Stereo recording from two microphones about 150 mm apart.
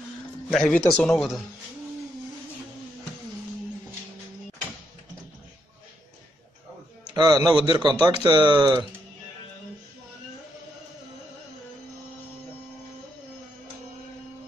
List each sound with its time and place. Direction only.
0.5 s speech: 5° left (ahead or behind)
7.2 s speech: 30° right (ahead or behind)